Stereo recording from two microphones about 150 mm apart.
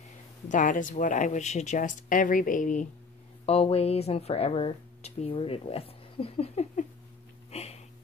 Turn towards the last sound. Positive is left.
turn(degrees=45)  # may be behind; listen again after turning